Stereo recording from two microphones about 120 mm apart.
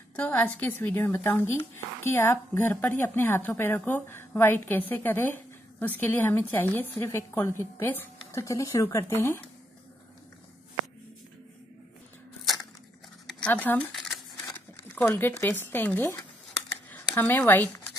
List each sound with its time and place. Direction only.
0.1 s a woman's voice: 15° left (ahead or behind)
13.3 s speech: 10° left (ahead or behind)
15.0 s a woman's voice: 20° left (ahead or behind)
16.7 s a sound: 15° left (ahead or behind)